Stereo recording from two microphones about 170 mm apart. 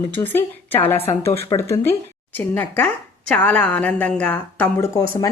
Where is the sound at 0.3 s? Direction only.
10° left (ahead or behind).